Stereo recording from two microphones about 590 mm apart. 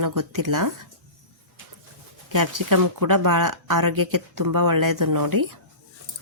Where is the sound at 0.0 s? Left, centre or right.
Right.